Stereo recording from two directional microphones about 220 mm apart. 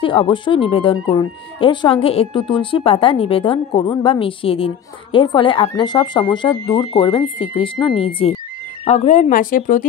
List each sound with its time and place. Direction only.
0.0 s speech: 25° left (ahead or behind)